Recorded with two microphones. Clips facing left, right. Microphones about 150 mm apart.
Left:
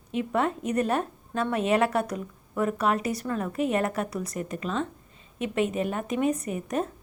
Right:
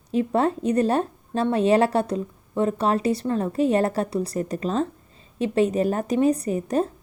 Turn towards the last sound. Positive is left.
turn(degrees=-30)  # may be behind; listen again after turning